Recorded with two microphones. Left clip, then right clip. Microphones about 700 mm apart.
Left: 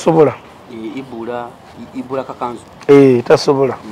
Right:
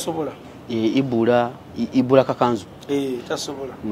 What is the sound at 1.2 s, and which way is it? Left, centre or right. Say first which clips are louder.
A man's voice: right 5 dB; right.